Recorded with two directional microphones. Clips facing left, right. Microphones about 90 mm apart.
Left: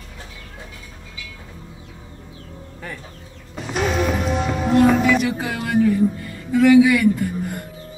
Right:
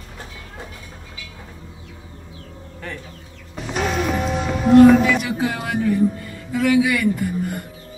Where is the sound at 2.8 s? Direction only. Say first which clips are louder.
Right 1 dB; 10° left (ahead or behind).